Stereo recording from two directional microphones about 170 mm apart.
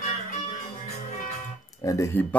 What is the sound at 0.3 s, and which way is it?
Music, 40° left (ahead or behind).